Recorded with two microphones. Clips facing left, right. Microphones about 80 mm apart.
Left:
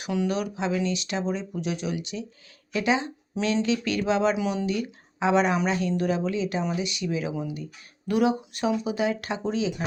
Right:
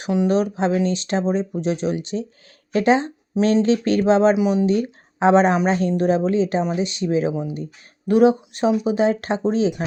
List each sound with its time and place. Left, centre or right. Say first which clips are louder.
0.0 s speech: right 8 dB; right
4.4 s speech: right 8 dB; right
4.6 s speech: right 8 dB; right